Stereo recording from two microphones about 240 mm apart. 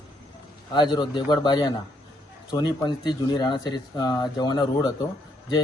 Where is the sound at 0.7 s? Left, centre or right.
Centre.